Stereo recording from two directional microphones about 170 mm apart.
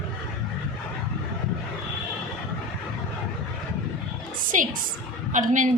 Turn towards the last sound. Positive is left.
turn(degrees=-45)  # may be behind; listen again after turning